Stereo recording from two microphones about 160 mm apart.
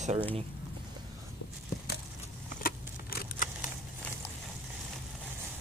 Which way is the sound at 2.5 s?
65° left (ahead or behind).